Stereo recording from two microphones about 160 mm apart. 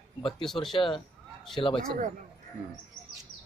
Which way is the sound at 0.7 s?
35° left (ahead or behind).